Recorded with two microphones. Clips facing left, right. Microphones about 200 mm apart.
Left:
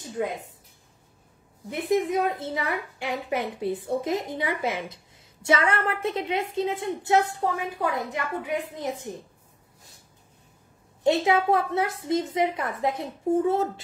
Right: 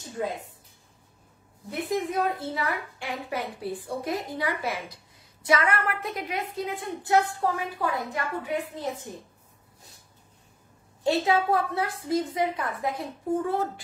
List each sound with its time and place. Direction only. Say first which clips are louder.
1.7 s a woman's voice: left 4 dB; 20° left (ahead or behind)
11.1 s a woman's voice: left 2 dB; 20° left (ahead or behind)